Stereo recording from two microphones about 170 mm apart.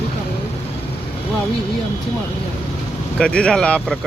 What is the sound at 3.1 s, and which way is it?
Speech, 5° left (ahead or behind).